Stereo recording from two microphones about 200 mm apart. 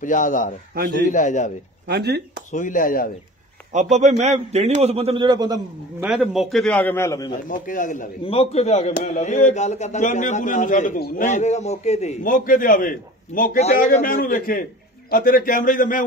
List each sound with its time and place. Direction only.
0.0 s a man's voice: 40° left (ahead or behind)
1.9 s speech: 55° right (ahead or behind)
2.5 s a man's voice: 40° left (ahead or behind)
3.9 s a man's voice: 35° right (ahead or behind); by 6.0 s 20° right (ahead or behind)
6.0 s a man's voice: centre (ahead or behind); by 7.3 s 15° left (ahead or behind)
7.3 s a man's voice: 40° left (ahead or behind)
8.3 s a man's voice: 30° left (ahead or behind)